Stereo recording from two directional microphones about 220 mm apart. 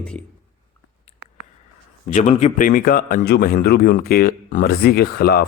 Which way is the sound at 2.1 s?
30° left (ahead or behind).